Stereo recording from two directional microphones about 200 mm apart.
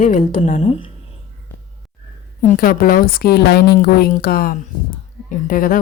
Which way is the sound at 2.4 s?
45° left (ahead or behind).